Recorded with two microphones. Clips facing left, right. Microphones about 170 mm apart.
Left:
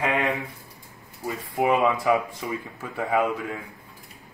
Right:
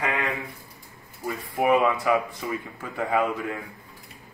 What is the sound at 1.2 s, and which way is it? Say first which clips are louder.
Speech: even; 20° left (ahead or behind).